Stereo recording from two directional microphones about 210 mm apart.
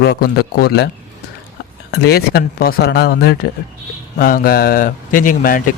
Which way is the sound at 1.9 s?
50° left (ahead or behind).